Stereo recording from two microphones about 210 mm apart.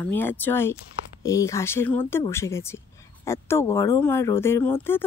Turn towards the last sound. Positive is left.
turn(degrees=10)  # may be behind; listen again after turning